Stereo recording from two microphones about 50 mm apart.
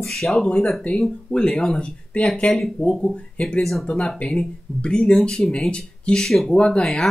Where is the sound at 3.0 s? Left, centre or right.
Centre.